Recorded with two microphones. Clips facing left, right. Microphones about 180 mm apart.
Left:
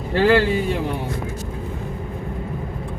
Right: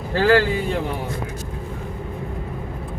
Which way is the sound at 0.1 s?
20° left (ahead or behind).